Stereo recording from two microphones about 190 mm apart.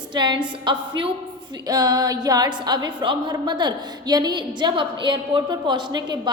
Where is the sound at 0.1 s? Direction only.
25° right (ahead or behind).